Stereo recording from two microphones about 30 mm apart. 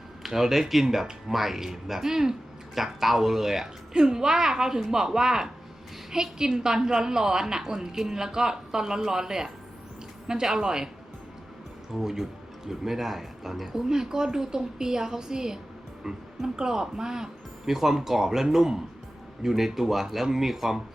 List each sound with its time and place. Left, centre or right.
0.2 s a man's voice: centre
3.9 s a woman's voice: right
11.9 s a man's voice: centre